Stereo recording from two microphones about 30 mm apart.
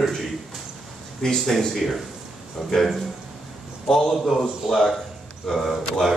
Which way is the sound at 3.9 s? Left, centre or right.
Centre.